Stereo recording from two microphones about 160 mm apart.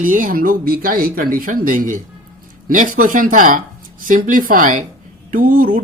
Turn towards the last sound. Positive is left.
turn(degrees=-60)  # may be behind; listen again after turning